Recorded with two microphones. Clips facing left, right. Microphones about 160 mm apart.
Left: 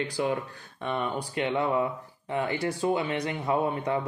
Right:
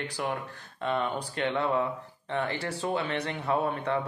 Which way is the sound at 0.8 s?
10° left (ahead or behind).